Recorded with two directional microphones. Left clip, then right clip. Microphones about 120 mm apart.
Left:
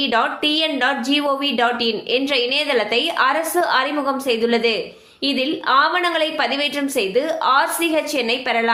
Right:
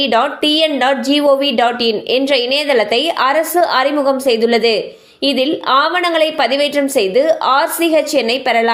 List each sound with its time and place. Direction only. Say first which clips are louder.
0.0 s a woman's voice: right 5 dB; 50° right (ahead or behind)